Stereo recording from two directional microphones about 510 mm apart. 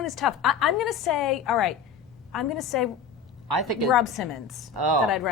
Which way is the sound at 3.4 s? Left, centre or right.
Right.